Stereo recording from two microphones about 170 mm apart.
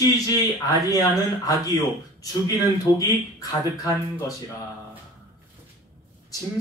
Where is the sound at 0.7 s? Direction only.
20° left (ahead or behind).